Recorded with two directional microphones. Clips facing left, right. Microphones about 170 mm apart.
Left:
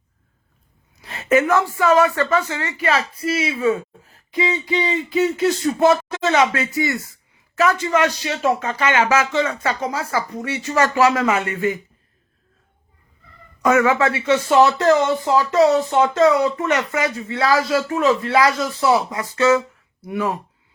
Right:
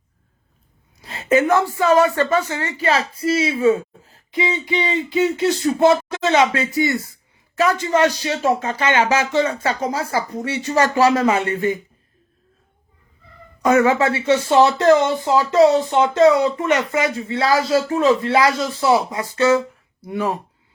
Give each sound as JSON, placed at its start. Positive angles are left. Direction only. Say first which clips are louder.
{"t": 1.0, "sound": "speech", "louder": "right 1 dB", "side_deg": -25}
{"t": 13.6, "sound": "speech", "louder": "right 1 dB", "side_deg": -30}